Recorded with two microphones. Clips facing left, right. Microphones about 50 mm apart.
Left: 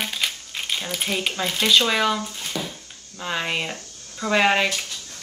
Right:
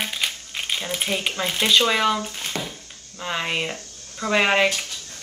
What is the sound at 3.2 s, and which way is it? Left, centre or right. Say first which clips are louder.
Speech: even; centre.